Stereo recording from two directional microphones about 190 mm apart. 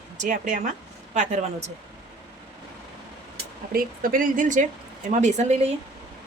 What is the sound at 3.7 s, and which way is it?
Speech, 45° right (ahead or behind).